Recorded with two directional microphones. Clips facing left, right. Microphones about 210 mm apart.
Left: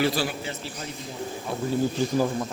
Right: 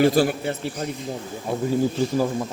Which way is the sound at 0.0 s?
50° right (ahead or behind).